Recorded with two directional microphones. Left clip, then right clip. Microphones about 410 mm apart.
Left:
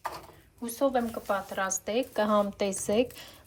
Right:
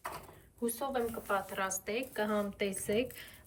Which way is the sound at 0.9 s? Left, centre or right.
Centre.